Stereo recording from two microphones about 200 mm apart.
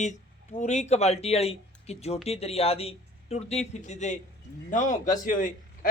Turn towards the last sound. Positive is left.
turn(degrees=40)  # may be behind; listen again after turning